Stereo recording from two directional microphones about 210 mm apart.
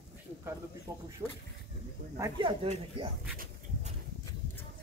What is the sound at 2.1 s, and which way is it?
Speech, 15° right (ahead or behind).